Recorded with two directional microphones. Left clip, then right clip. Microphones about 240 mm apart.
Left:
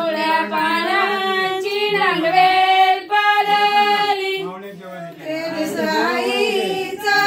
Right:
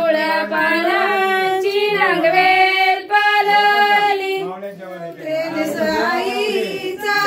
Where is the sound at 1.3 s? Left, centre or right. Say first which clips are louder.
Right 3 dB; centre.